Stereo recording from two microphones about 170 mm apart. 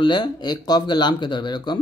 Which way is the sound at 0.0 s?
25° left (ahead or behind).